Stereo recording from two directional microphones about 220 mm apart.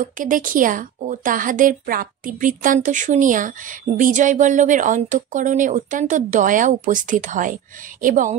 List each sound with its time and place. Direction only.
0.0 s a woman's voice: 35° right (ahead or behind)